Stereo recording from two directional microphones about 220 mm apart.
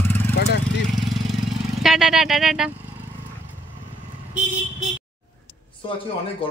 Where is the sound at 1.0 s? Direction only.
Centre (ahead or behind).